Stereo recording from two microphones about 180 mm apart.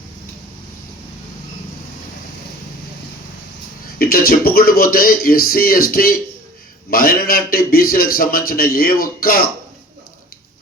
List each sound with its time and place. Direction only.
3.9 s a man's voice: 55° left (ahead or behind)